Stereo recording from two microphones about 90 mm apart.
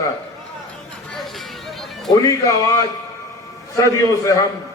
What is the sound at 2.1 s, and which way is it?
Speech, 40° left (ahead or behind).